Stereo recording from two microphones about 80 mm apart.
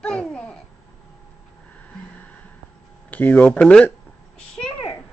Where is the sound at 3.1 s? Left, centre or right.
Left.